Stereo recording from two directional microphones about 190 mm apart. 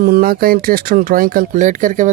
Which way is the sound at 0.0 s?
50° right (ahead or behind).